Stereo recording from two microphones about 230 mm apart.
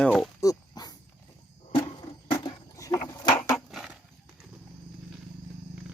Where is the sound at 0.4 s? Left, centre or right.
Centre.